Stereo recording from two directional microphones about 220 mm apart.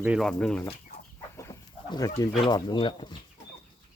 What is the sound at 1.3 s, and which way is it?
Chicken, 15° left (ahead or behind).